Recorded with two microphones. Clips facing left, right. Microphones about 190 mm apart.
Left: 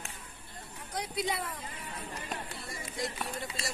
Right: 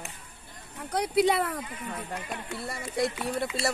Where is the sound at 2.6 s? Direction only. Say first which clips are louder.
Right 13 dB; 70° right (ahead or behind).